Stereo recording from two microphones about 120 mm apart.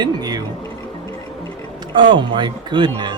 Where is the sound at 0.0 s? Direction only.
35° right (ahead or behind).